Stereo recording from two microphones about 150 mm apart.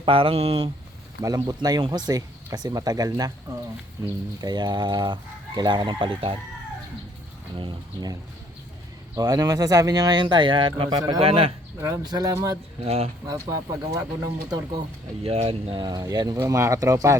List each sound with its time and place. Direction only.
0.0 s speech: 35° right (ahead or behind)
1.2 s speech: 25° right (ahead or behind)
4.4 s speech: 30° right (ahead or behind)
7.5 s speech: 30° right (ahead or behind)
11.2 s speech: 40° right (ahead or behind)
11.8 s speech: 25° right (ahead or behind)
12.8 s speech: 40° right (ahead or behind)
13.2 s speech: 25° right (ahead or behind)
15.2 s speech: 40° right (ahead or behind); by 17.2 s 20° right (ahead or behind)